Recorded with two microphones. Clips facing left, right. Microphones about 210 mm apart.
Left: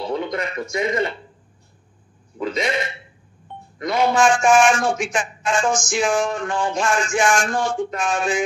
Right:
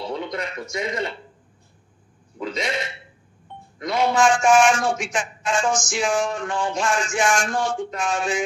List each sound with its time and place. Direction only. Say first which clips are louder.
0.0 s speech: left 4 dB; 55° left (ahead or behind)
2.4 s a man's voice: left 4 dB; 50° left (ahead or behind)